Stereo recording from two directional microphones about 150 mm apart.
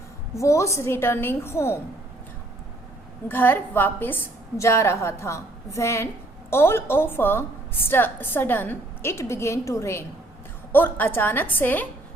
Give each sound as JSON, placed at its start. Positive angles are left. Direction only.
{"t": 0.3, "sound": "a woman's voice", "side_deg": 20}
{"t": 3.2, "sound": "a woman's voice", "side_deg": 15}